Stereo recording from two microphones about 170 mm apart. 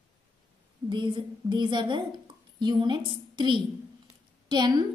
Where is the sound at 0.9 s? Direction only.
25° right (ahead or behind).